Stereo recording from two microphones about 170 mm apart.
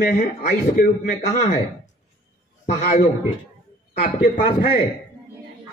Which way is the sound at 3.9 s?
60° left (ahead or behind).